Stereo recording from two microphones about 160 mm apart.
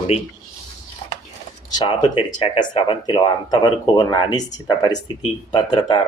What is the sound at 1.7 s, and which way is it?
Speech, 30° left (ahead or behind).